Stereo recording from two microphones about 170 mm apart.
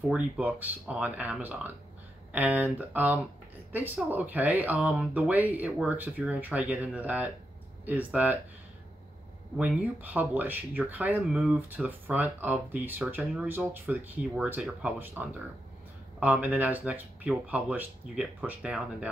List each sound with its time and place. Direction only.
0.1 s speech: 5° right (ahead or behind)
9.6 s speech: 10° right (ahead or behind)